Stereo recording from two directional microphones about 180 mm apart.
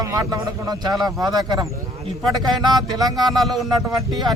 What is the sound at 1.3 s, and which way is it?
Speech, 20° right (ahead or behind).